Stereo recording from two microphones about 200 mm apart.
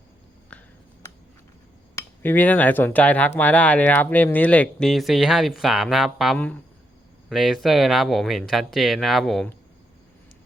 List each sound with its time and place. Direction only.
2.0 s speech: 10° left (ahead or behind)